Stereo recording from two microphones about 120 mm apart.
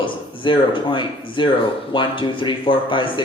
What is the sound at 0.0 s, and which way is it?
Speech, 45° left (ahead or behind).